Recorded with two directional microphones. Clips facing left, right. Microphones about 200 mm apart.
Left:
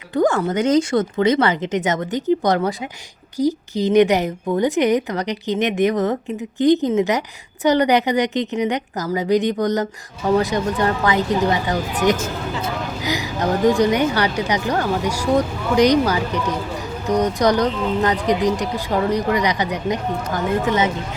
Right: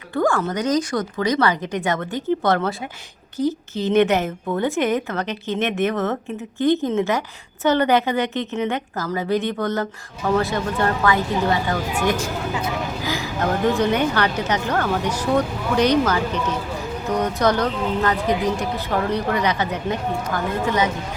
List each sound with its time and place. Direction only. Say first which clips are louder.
0.1 s speech: left 3 dB; 20° left (ahead or behind)